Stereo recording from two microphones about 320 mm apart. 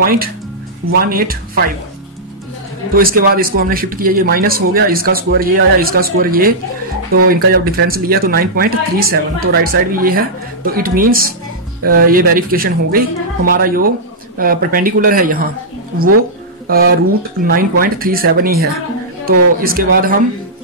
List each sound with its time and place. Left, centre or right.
0.0 s speech: right
2.9 s speech: right
16.6 s speech: right